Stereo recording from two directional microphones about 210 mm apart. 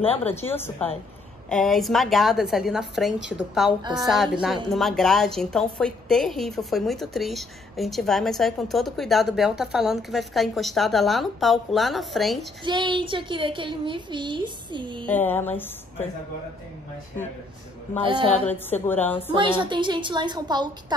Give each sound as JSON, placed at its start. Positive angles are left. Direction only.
{"t": 0.0, "sound": "speech", "side_deg": 30}
{"t": 0.3, "sound": "a woman's voice", "side_deg": 10}
{"t": 12.6, "sound": "a woman's voice", "side_deg": -20}
{"t": 15.0, "sound": "a woman's voice", "side_deg": 10}
{"t": 18.0, "sound": "a woman's voice", "side_deg": -25}
{"t": 18.5, "sound": "a woman's voice", "side_deg": 10}
{"t": 19.3, "sound": "a woman's voice", "side_deg": -25}